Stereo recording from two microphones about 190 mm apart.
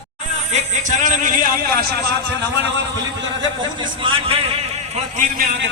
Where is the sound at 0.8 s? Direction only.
45° right (ahead or behind).